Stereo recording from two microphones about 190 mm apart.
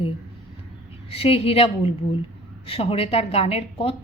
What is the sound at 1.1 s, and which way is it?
A woman's voice, 30° left (ahead or behind).